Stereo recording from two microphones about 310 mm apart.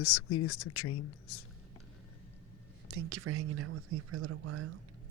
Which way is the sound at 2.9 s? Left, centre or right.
Right.